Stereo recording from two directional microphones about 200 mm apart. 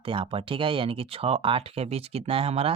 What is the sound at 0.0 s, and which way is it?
Speech, 25° right (ahead or behind).